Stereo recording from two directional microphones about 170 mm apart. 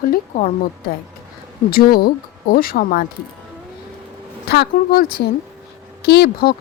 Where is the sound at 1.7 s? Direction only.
60° left (ahead or behind).